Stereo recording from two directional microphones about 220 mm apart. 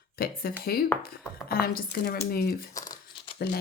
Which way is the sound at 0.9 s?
10° left (ahead or behind).